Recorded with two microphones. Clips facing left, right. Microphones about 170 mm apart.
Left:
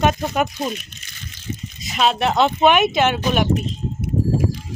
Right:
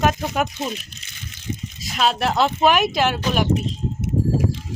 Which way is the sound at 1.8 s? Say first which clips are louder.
Left 2 dB; centre (ahead or behind).